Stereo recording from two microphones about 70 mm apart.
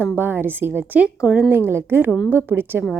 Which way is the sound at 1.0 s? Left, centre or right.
Centre.